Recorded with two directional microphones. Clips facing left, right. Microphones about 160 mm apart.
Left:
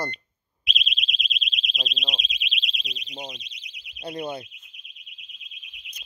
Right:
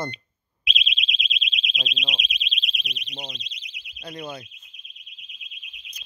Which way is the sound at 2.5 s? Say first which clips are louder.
Right 1 dB; 50° right (ahead or behind).